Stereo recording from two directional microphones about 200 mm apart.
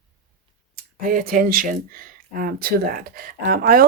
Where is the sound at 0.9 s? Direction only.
45° right (ahead or behind).